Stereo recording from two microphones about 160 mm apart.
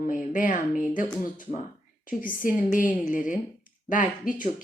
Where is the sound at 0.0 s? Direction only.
55° left (ahead or behind).